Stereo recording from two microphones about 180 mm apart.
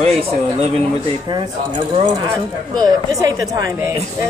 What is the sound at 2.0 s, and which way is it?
A woman's voice, 20° right (ahead or behind).